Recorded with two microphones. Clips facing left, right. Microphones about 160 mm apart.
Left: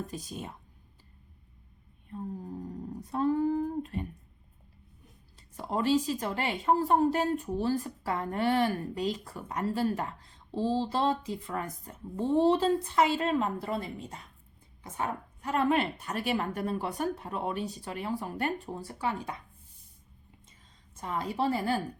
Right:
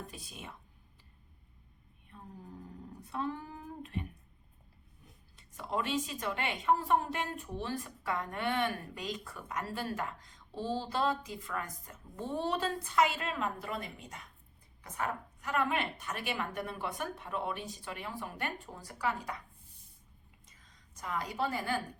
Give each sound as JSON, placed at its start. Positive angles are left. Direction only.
{"t": 0.1, "sound": "a woman's voice", "side_deg": 40}
{"t": 2.0, "sound": "a sound", "side_deg": 40}
{"t": 5.4, "sound": "a woman's voice", "side_deg": 35}
{"t": 20.9, "sound": "speech", "side_deg": 30}